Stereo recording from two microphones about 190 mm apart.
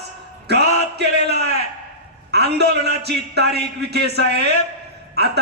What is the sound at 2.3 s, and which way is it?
A man's voice, 60° right (ahead or behind).